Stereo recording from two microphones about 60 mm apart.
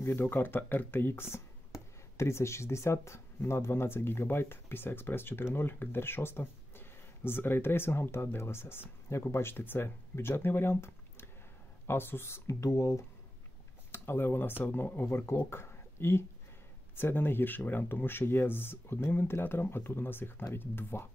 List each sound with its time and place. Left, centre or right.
0.2 s speech: left
12.4 s speech: left
13.9 s speech: left